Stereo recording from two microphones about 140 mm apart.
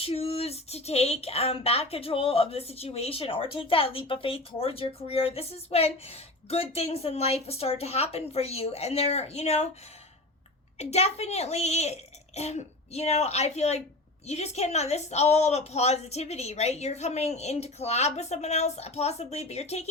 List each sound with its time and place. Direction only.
0.0 s speech: 45° left (ahead or behind)
10.8 s speech: 50° left (ahead or behind)